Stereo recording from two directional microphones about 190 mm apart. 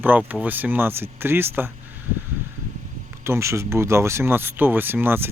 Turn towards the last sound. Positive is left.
turn(degrees=-10)  # may be behind; listen again after turning